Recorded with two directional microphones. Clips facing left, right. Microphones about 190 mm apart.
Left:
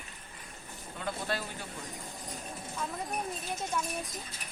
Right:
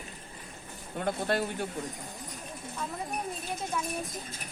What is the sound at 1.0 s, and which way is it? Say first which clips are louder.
Speech: right 6 dB; 50° right (ahead or behind).